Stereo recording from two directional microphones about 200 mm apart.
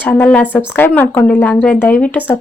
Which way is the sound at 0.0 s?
10° left (ahead or behind).